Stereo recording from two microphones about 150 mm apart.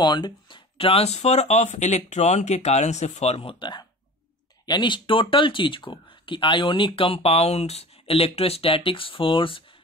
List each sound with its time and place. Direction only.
0.0 s speech: 30° left (ahead or behind)